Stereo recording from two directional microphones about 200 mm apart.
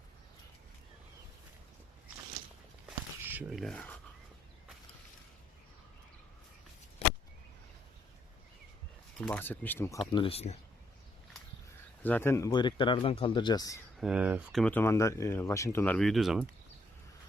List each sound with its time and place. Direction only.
3.2 s a sound: 10° right (ahead or behind)
3.6 s speech: 5° left (ahead or behind)
9.2 s speech: 5° left (ahead or behind); by 10.6 s 30° left (ahead or behind)
12.0 s speech: 10° left (ahead or behind)
14.0 s speech: 5° right (ahead or behind)
14.6 s speech: 10° left (ahead or behind)